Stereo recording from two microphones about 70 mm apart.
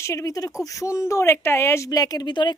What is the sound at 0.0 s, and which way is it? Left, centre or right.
Speech, left.